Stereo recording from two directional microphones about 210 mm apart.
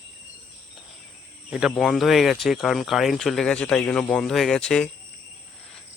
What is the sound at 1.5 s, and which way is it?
Speech, centre (ahead or behind).